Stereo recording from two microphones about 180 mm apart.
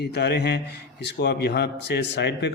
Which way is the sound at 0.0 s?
65° left (ahead or behind).